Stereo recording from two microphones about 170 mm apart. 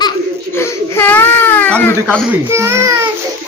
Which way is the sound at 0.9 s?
10° left (ahead or behind).